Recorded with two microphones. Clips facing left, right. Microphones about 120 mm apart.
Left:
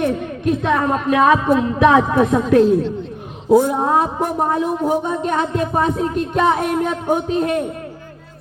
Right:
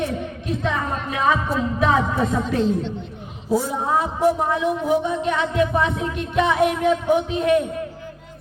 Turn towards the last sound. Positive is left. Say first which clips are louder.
# even
turn(degrees=40)  # may be behind; listen again after turning